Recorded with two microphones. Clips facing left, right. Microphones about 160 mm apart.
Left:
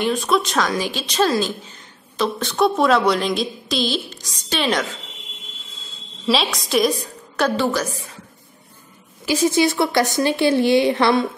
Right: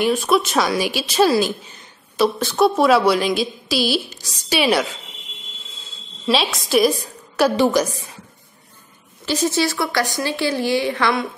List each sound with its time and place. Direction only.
0.0 s a woman's voice: 5° right (ahead or behind)
6.2 s a woman's voice: centre (ahead or behind)
7.3 s speech: 10° right (ahead or behind)
9.2 s a woman's voice: 10° left (ahead or behind)